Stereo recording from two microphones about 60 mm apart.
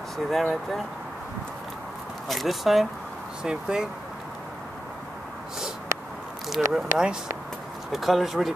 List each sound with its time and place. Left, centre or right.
0.3 s speech: centre
2.2 s speech: centre
3.4 s speech: centre
6.5 s speech: centre
7.9 s speech: centre